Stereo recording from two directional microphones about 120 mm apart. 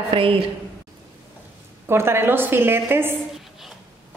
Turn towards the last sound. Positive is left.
turn(degrees=-20)  # may be behind; listen again after turning